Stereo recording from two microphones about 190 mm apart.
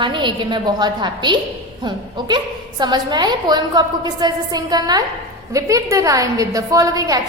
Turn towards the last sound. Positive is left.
turn(degrees=-20)  # may be behind; listen again after turning